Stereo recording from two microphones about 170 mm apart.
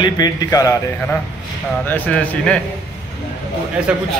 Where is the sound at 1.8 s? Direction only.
10° left (ahead or behind).